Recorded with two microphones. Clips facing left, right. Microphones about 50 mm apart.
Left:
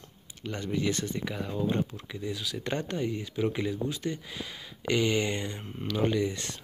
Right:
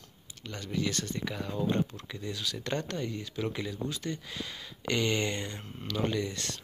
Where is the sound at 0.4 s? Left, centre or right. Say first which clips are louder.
Left 3 dB; centre.